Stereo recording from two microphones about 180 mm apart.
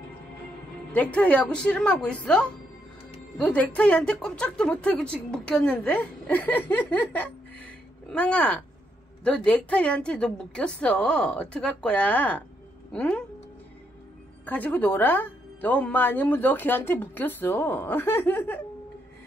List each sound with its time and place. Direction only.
1.1 s a woman's voice: 5° left (ahead or behind)
14.4 s a woman's voice: 10° left (ahead or behind)